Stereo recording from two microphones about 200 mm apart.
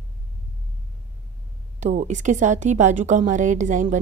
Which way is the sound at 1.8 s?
35° right (ahead or behind).